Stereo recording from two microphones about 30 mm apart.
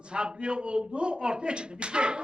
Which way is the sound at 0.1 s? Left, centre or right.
Right.